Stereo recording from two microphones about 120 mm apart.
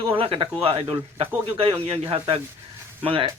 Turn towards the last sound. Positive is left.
turn(degrees=-50)  # may be behind; listen again after turning